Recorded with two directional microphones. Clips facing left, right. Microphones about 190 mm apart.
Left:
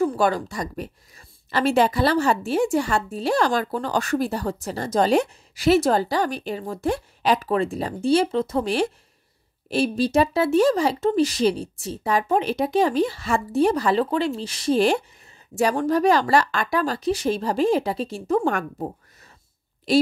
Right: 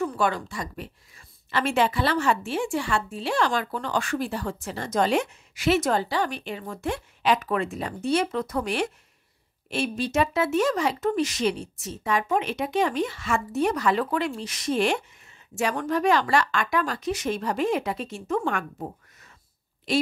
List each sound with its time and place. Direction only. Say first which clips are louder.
0.0 s a woman's voice: left 5 dB; 35° left (ahead or behind)
19.9 s a woman's voice: left 6 dB; 35° left (ahead or behind)